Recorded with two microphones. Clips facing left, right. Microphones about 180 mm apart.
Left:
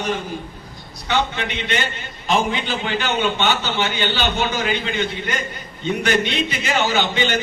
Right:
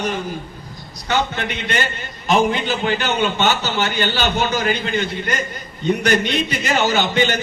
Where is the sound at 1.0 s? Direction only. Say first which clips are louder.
Right 1 dB; 45° right (ahead or behind).